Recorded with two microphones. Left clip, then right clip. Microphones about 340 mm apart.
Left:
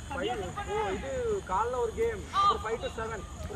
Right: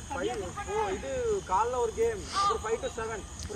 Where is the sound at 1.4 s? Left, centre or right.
Right.